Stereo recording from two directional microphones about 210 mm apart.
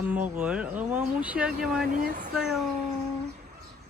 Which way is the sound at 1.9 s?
40° right (ahead or behind).